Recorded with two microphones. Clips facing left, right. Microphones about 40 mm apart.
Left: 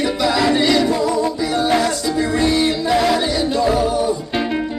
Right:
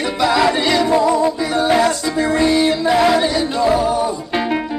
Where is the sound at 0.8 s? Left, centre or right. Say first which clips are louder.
Right 3 dB; right.